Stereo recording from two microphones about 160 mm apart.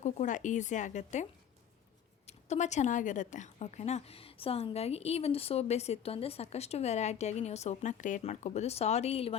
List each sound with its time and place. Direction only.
0.0 s a woman's voice: 50° left (ahead or behind)